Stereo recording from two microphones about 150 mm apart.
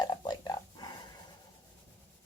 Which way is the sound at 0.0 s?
25° left (ahead or behind).